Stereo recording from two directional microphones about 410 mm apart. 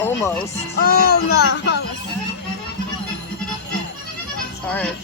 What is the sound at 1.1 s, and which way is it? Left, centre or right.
Speech, left.